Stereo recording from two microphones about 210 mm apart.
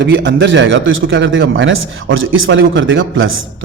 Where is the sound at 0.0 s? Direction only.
55° right (ahead or behind).